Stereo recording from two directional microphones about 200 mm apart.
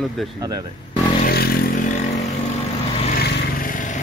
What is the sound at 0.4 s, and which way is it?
Speech, 20° right (ahead or behind).